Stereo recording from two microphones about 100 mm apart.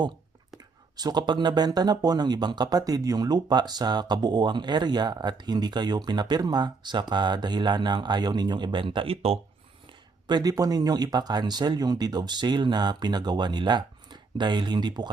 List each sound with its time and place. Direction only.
0.9 s speech: 45° right (ahead or behind); by 9.4 s 75° right (ahead or behind)
10.2 s speech: 45° right (ahead or behind)